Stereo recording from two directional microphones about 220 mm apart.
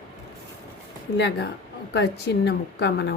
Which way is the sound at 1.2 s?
50° left (ahead or behind).